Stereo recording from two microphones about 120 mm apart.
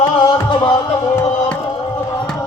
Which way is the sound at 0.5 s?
40° left (ahead or behind).